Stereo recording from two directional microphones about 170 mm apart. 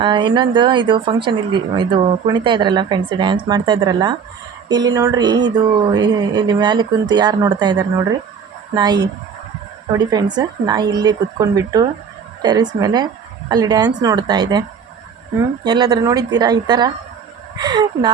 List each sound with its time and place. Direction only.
0.0 s speech: 30° right (ahead or behind)